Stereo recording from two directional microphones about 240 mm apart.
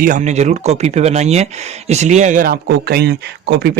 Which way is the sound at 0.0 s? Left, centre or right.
Right.